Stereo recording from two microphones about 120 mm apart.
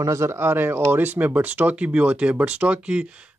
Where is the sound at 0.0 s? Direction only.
25° right (ahead or behind).